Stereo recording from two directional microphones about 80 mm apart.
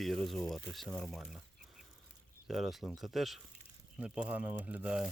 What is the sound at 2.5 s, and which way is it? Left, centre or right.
Speech, centre.